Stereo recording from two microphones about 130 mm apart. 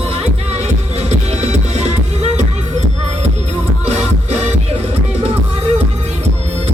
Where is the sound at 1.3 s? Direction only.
55° right (ahead or behind).